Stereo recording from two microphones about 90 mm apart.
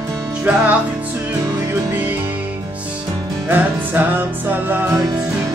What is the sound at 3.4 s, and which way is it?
Music, 20° right (ahead or behind).